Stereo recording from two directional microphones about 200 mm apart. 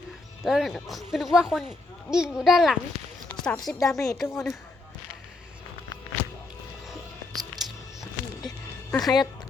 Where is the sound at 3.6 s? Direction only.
20° left (ahead or behind).